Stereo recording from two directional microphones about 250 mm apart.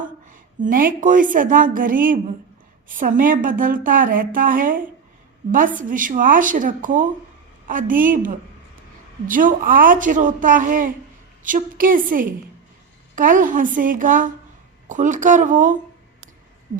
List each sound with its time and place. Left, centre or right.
0.0 s a woman's voice: right